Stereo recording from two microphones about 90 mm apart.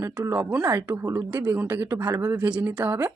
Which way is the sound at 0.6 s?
25° right (ahead or behind).